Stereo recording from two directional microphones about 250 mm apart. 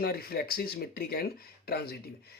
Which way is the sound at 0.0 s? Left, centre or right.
Left.